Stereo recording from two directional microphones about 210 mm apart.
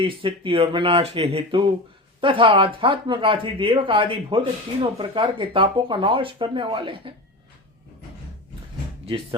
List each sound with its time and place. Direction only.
0.0 s speech: 25° right (ahead or behind)